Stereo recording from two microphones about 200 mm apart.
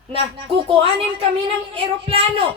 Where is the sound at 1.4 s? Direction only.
30° right (ahead or behind).